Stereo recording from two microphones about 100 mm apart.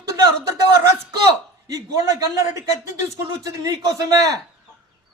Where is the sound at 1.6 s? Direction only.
30° right (ahead or behind).